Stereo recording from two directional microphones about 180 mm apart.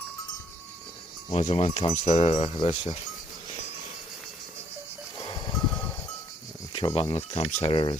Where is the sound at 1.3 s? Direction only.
35° left (ahead or behind).